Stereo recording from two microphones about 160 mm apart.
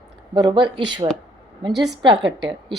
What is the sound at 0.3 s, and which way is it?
A woman's voice, 30° right (ahead or behind).